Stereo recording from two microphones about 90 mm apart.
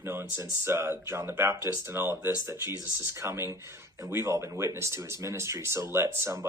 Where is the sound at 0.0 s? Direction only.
25° right (ahead or behind).